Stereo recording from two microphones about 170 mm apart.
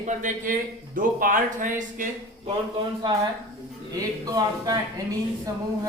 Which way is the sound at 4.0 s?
20° right (ahead or behind).